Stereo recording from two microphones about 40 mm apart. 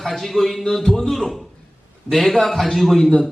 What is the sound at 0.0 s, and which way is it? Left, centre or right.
A man's voice, centre.